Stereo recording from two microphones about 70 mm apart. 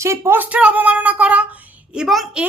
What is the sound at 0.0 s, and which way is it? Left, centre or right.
Speech, right.